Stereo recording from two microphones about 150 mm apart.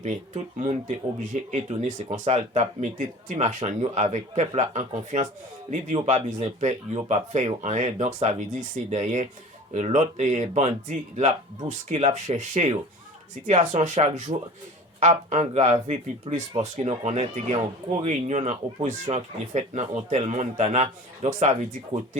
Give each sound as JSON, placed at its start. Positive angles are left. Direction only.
{"t": 0.0, "sound": "speech", "side_deg": -50}